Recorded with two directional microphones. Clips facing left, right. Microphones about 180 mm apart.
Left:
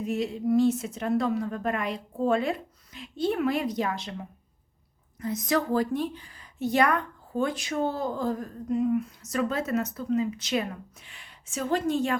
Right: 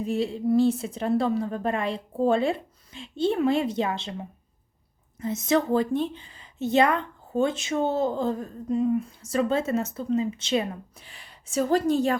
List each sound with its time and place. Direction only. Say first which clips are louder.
0.0 s speech: right 2 dB; 30° right (ahead or behind)